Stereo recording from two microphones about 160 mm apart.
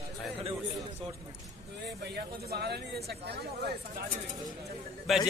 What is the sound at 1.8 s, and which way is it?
Speech, 90° right.